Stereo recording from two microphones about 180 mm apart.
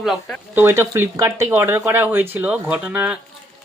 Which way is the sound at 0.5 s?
10° right (ahead or behind).